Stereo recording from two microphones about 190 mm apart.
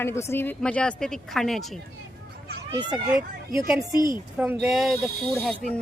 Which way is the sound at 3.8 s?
20° right (ahead or behind).